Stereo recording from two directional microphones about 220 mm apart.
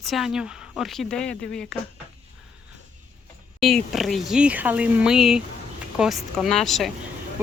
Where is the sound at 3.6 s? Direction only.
Centre (ahead or behind).